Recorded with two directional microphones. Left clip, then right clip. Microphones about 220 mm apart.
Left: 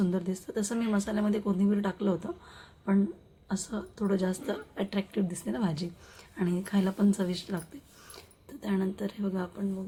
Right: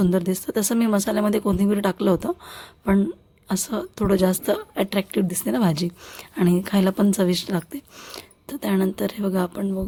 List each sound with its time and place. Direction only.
0.0 s a woman's voice: 50° right (ahead or behind)